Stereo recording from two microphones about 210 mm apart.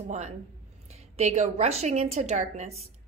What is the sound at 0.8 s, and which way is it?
A woman's voice, 30° right (ahead or behind).